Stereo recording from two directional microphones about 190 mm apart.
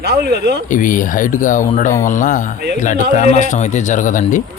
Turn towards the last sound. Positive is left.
turn(degrees=40)  # may be behind; listen again after turning